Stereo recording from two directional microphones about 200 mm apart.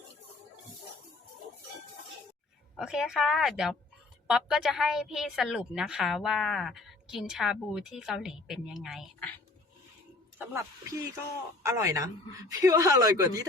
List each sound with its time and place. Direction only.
2.7 s a woman's voice: 5° right (ahead or behind)
10.3 s speech: 10° right (ahead or behind)